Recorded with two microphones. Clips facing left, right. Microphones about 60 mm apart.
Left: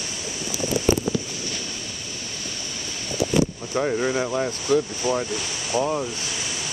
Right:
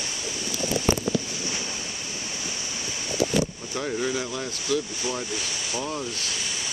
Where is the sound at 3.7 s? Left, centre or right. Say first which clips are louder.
Left 5 dB; left.